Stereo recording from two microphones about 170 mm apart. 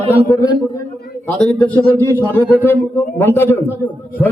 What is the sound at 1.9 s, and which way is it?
A man's voice, 15° left (ahead or behind).